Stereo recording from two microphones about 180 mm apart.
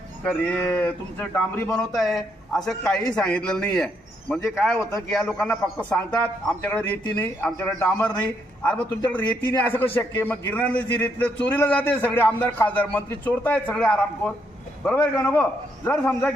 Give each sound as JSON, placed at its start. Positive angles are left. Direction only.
{"t": 0.3, "sound": "a man's voice", "side_deg": 5}
{"t": 1.6, "sound": "a man's voice", "side_deg": 0}
{"t": 4.8, "sound": "a man's voice", "side_deg": 15}
{"t": 5.1, "sound": "a man's voice", "side_deg": 5}